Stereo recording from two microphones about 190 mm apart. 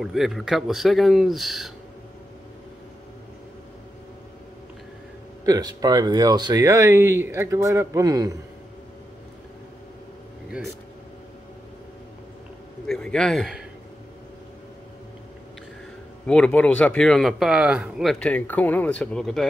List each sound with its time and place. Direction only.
0.0 s speech: centre (ahead or behind)
5.4 s speech: 20° right (ahead or behind)
12.8 s speech: 5° left (ahead or behind)
16.3 s speech: 5° left (ahead or behind)